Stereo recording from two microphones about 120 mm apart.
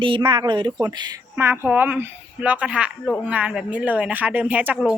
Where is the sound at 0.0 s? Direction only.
45° right (ahead or behind).